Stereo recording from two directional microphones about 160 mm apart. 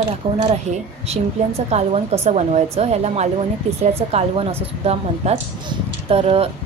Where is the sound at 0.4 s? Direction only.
40° right (ahead or behind).